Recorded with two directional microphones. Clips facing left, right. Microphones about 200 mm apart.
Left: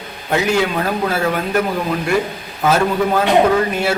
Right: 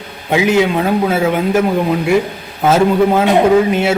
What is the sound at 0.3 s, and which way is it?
Speech, 15° right (ahead or behind).